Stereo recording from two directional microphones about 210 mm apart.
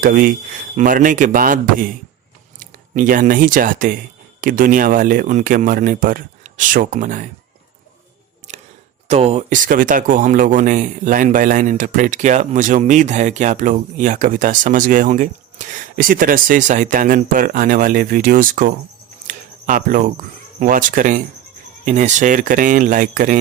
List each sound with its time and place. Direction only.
0.0 s speech: 40° right (ahead or behind)
8.5 s a sound: 30° right (ahead or behind)
9.0 s speech: 30° right (ahead or behind)